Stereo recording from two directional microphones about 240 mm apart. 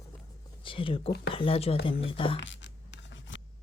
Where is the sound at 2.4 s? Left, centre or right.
Left.